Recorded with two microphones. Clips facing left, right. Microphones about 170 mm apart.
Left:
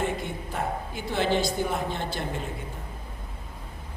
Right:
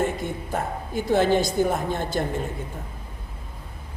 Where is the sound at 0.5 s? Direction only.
45° right (ahead or behind).